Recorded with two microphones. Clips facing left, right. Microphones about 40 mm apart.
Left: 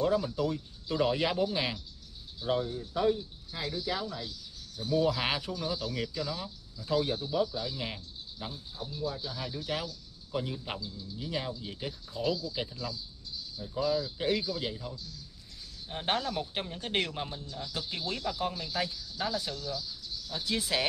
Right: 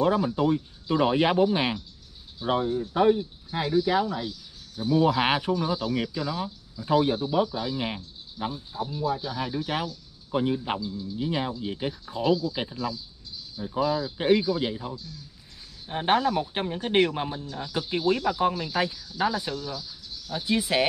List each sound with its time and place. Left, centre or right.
0.0 s speech: right